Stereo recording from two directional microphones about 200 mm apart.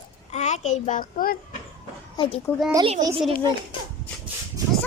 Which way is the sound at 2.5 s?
10° left (ahead or behind).